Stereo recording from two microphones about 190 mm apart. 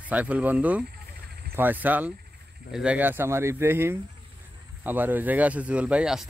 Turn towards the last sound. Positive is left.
turn(degrees=-5)  # may be behind; listen again after turning